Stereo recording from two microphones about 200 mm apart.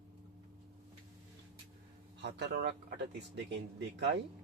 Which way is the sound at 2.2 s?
55° right (ahead or behind).